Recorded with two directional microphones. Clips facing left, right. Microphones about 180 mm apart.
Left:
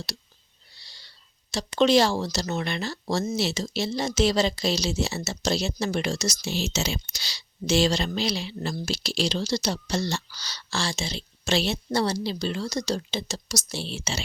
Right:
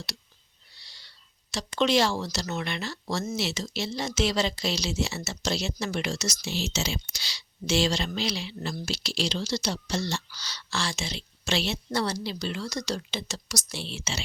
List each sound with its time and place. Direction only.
0.8 s speech: 35° left (ahead or behind)